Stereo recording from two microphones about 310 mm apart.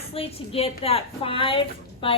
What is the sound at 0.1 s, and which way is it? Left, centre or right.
A woman's voice, centre.